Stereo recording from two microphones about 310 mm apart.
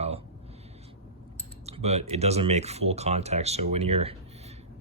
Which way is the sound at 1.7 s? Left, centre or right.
Centre.